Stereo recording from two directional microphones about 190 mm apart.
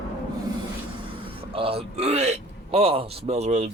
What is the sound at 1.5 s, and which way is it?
Music, 30° right (ahead or behind).